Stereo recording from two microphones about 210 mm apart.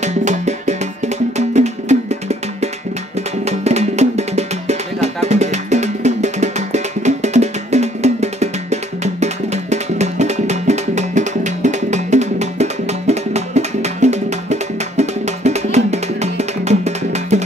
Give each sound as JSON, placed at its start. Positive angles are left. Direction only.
{"t": 0.0, "sound": "music", "side_deg": -35}